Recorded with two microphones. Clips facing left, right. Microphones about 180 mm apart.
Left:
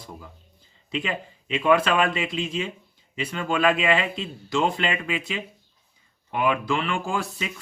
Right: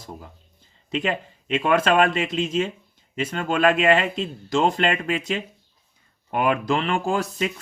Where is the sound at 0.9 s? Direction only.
45° right (ahead or behind).